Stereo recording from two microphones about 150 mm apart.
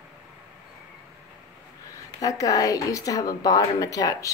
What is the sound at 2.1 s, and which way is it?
A woman's voice, 25° left (ahead or behind).